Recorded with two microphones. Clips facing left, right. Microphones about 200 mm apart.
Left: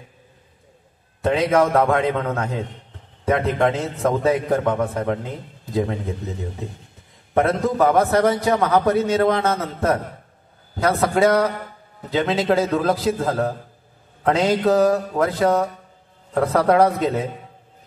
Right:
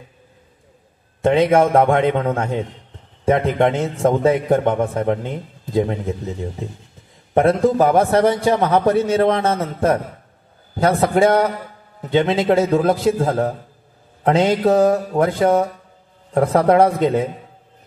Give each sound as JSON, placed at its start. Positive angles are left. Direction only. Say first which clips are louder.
{"t": 1.2, "sound": "a man's voice", "louder": "right 4 dB", "side_deg": -30}
{"t": 7.3, "sound": "a man's voice", "louder": "right 4 dB", "side_deg": -30}